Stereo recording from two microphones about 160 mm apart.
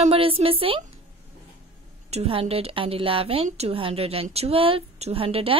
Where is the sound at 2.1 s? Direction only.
35° right (ahead or behind).